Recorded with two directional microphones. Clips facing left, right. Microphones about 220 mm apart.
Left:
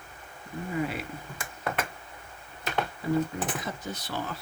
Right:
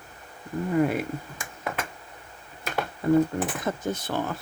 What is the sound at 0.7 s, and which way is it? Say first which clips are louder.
Speech: right 8 dB; 50° right (ahead or behind).